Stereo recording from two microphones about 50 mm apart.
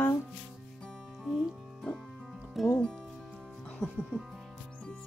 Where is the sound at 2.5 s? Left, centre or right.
Centre.